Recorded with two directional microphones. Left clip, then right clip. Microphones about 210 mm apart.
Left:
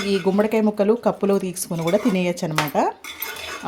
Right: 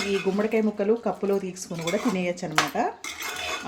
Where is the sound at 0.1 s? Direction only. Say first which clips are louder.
Left 7 dB; 45° left (ahead or behind).